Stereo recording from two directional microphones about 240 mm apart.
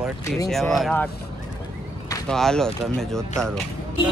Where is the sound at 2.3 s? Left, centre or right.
Centre.